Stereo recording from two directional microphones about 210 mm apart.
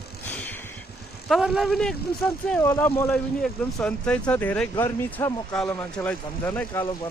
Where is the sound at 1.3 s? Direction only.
Centre (ahead or behind).